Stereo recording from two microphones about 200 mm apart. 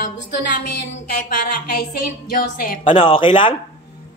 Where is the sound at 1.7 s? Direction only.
50° left (ahead or behind).